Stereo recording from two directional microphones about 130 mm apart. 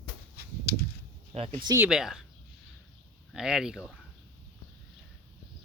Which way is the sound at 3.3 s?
5° right (ahead or behind).